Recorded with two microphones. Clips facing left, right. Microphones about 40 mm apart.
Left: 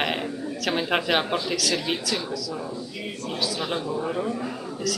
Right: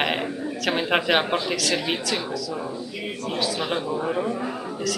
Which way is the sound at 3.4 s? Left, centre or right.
Centre.